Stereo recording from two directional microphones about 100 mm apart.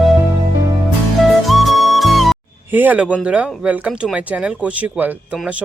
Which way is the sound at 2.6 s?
20° right (ahead or behind).